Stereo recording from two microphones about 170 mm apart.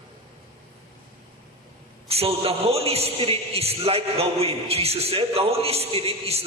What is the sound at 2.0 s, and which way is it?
A man's voice, 35° right (ahead or behind).